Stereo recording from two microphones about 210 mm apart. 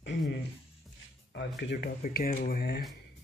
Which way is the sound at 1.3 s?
55° left (ahead or behind).